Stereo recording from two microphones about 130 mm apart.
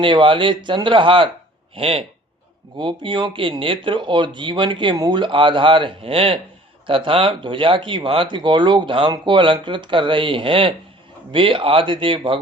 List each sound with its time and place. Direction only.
0.0 s speech: 40° right (ahead or behind)